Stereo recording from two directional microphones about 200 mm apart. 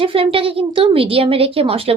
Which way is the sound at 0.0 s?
25° right (ahead or behind).